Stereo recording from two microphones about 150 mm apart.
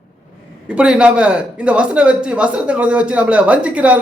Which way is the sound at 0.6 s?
5° right (ahead or behind).